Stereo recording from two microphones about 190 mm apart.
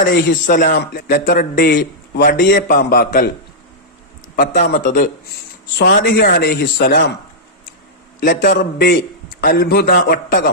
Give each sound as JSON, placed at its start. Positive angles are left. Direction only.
{"t": 0.4, "sound": "a man's voice", "side_deg": 45}
{"t": 4.4, "sound": "a man's voice", "side_deg": 45}
{"t": 5.7, "sound": "speech", "side_deg": 60}
{"t": 8.2, "sound": "a man's voice", "side_deg": 45}